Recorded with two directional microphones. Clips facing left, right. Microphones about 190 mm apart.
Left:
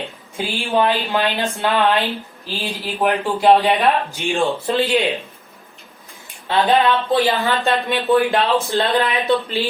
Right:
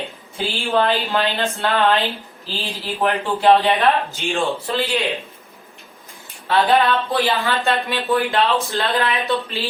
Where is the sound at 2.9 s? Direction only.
15° left (ahead or behind).